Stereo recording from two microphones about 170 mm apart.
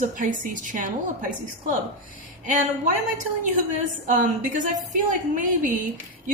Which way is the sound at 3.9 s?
50° right (ahead or behind).